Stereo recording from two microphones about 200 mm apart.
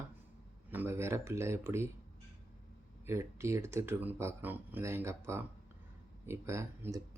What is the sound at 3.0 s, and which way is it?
Speech, 15° right (ahead or behind).